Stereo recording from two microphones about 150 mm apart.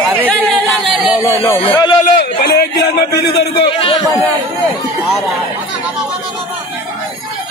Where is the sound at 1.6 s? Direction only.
35° left (ahead or behind).